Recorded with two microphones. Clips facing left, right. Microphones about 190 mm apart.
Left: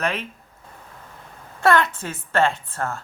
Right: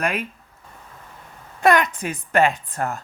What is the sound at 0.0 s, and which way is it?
Speech, 10° right (ahead or behind).